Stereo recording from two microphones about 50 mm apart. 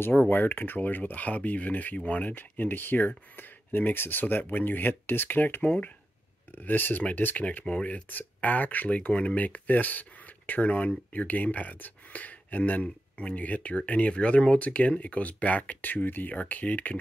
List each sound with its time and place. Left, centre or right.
0.0 s speech: left